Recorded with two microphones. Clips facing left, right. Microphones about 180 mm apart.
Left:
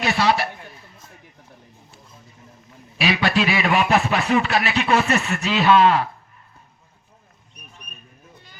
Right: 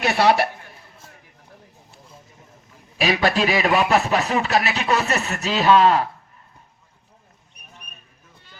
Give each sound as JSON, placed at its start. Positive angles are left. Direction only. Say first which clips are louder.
{"t": 0.0, "sound": "a woman's voice", "louder": "right 3 dB", "side_deg": -55}
{"t": 3.0, "sound": "speech", "louder": "right 1 dB", "side_deg": -40}